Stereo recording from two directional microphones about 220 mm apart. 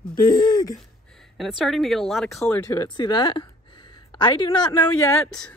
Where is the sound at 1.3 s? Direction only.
Centre (ahead or behind); by 4.8 s 20° left (ahead or behind).